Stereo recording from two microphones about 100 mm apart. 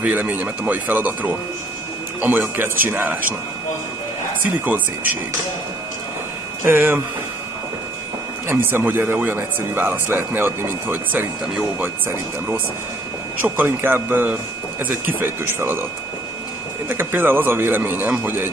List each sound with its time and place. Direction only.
0.0 s speech: 15° right (ahead or behind)
4.6 s speech: 15° right (ahead or behind)
6.6 s speech: 20° right (ahead or behind)
8.5 s speech: 20° right (ahead or behind)
13.4 s speech: 20° right (ahead or behind)
16.9 s speech: 20° right (ahead or behind)